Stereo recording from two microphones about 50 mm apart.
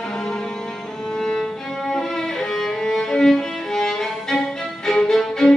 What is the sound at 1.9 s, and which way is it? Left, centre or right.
Music, centre.